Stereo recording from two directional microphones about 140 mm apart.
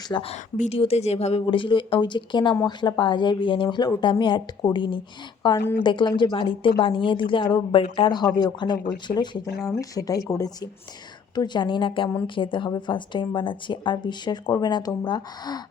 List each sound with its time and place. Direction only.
0.1 s a woman's voice: 40° left (ahead or behind)